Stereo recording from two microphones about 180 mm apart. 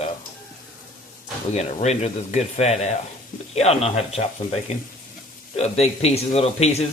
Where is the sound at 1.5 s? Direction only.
35° left (ahead or behind).